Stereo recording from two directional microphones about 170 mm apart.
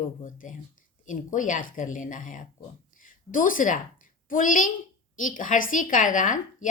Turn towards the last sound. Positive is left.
turn(degrees=50)  # may be behind; listen again after turning